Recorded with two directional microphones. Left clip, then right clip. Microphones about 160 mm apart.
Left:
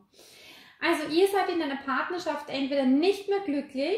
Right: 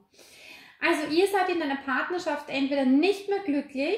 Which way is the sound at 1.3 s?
20° left (ahead or behind).